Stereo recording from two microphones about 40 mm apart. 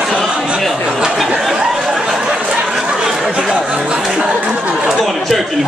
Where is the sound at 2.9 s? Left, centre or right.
Right.